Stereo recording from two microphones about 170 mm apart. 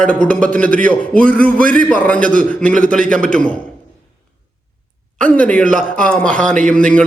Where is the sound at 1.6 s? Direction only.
55° right (ahead or behind).